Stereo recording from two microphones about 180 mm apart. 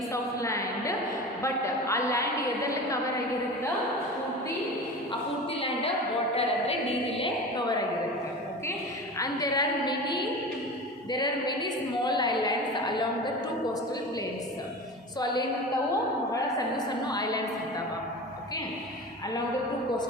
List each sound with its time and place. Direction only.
0.1 s a sound: 15° left (ahead or behind)
1.4 s a woman's voice: 15° left (ahead or behind)
5.5 s a woman's voice: 30° left (ahead or behind)
9.1 s a woman's voice: 20° left (ahead or behind)
16.3 s a woman's voice: 20° left (ahead or behind)